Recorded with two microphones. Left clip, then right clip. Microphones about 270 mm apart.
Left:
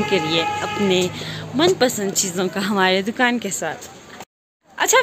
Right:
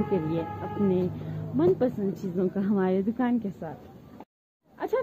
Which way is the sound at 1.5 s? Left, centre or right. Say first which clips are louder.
Left 7 dB; centre.